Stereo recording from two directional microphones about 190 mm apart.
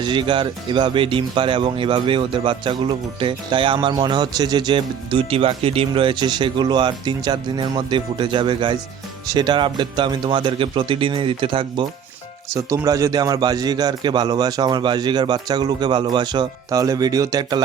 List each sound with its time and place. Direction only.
0.0 s speech: 25° right (ahead or behind)